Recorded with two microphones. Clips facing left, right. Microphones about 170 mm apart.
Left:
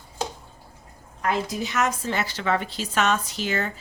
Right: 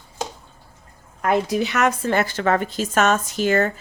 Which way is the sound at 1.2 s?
55° right (ahead or behind).